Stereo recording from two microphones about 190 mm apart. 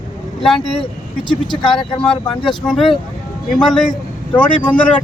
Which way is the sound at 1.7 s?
25° left (ahead or behind).